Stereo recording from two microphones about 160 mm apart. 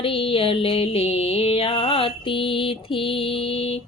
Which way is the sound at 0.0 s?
35° left (ahead or behind).